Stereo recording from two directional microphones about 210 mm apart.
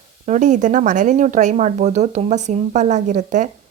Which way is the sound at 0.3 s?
35° right (ahead or behind).